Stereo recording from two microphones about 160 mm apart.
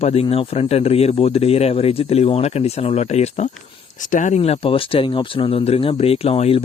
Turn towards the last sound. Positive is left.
turn(degrees=35)  # may be behind; listen again after turning